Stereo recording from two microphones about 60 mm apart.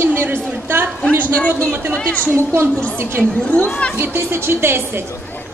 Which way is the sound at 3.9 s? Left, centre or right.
Right.